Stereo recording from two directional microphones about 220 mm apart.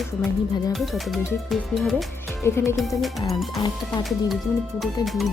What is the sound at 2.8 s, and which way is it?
Speech, centre (ahead or behind).